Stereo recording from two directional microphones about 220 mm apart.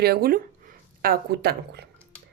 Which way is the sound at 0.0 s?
45° right (ahead or behind).